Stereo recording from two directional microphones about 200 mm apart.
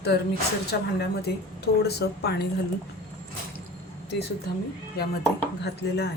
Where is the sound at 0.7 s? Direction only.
50° left (ahead or behind).